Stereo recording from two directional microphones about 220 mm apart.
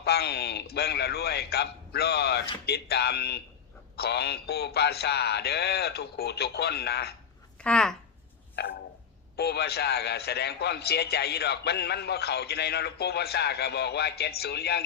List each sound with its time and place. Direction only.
0.0 s a man's voice: 45° left (ahead or behind)
7.6 s speech: 5° left (ahead or behind)
8.6 s a man's voice: 50° left (ahead or behind)